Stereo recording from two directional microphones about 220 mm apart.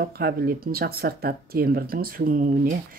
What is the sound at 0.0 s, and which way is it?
Speech, 45° right (ahead or behind).